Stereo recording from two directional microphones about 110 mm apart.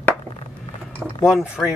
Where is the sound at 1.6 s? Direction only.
5° left (ahead or behind).